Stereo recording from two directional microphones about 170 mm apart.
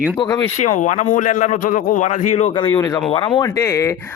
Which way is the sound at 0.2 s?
25° left (ahead or behind).